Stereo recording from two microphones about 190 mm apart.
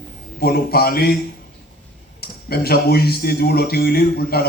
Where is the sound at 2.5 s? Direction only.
55° left (ahead or behind).